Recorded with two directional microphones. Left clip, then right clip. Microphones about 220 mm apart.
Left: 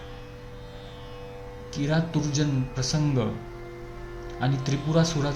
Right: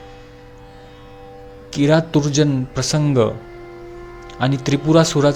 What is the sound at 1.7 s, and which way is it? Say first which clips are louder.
A man's voice: right 13 dB; 40° right (ahead or behind).